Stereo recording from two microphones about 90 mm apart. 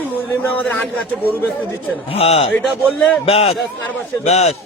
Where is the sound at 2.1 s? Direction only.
90° left.